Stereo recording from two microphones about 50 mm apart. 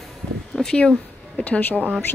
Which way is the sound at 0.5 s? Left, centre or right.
Centre.